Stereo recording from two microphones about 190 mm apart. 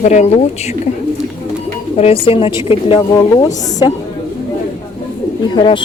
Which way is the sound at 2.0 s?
30° left (ahead or behind).